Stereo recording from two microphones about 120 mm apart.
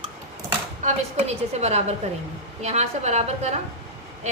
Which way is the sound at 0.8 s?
65° right (ahead or behind).